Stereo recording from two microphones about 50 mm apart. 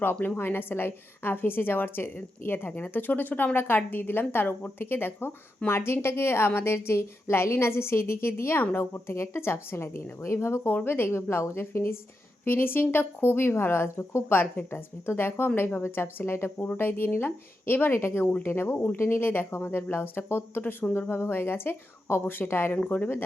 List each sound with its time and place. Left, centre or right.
0.0 s a woman's voice: left
5.6 s a woman's voice: left
10.8 s speech: left
18.2 s speech: left
22.8 s speech: left